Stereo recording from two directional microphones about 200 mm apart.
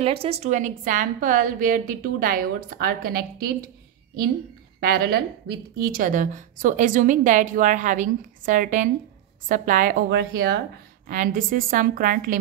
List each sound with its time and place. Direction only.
0.0 s a woman's voice: 30° right (ahead or behind); by 3.7 s 50° right (ahead or behind)
4.7 s a woman's voice: 50° right (ahead or behind)